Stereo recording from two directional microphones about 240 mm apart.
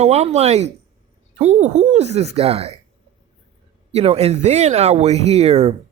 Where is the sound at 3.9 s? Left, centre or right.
Right.